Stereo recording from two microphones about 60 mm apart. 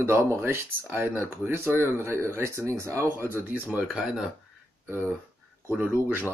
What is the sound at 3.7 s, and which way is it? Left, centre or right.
Speech, right.